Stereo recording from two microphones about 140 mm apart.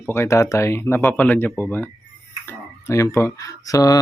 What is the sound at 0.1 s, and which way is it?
Speech, 20° left (ahead or behind).